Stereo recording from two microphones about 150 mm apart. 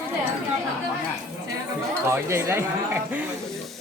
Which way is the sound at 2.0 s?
15° right (ahead or behind).